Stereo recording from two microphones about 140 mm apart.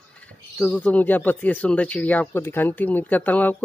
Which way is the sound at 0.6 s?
10° left (ahead or behind).